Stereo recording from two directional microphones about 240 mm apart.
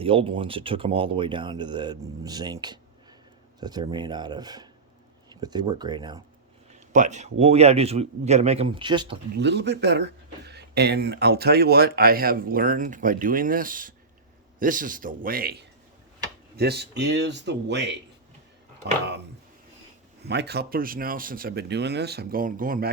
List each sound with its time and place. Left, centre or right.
0.0 s speech: right
6.7 s speech: right
9.3 s speech: right
16.6 s speech: right
20.2 s speech: right